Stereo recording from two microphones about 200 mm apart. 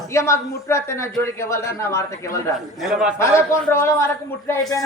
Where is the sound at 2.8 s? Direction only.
Centre (ahead or behind).